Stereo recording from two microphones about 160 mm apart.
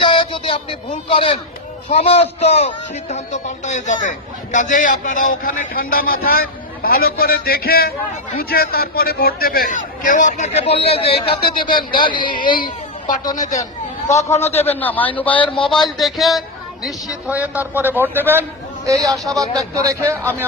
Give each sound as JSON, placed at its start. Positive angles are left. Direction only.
{"t": 0.0, "sound": "a sound", "side_deg": 35}
{"t": 1.1, "sound": "a man's voice", "side_deg": 35}
{"t": 11.3, "sound": "a man's voice", "side_deg": 70}
{"t": 14.1, "sound": "a man's voice", "side_deg": 20}
{"t": 16.0, "sound": "a man's voice", "side_deg": 0}